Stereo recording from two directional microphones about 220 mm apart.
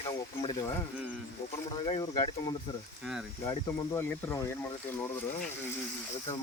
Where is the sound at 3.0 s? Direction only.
Centre (ahead or behind).